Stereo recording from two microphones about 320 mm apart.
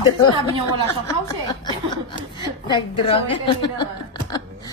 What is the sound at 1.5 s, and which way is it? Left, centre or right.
A woman's voice, centre.